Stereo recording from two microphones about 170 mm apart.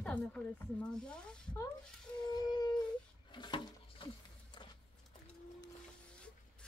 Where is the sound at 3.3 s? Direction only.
30° left (ahead or behind).